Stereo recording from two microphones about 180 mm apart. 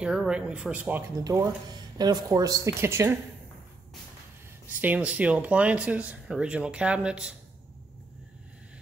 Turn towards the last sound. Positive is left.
turn(degrees=-5)  # may be behind; listen again after turning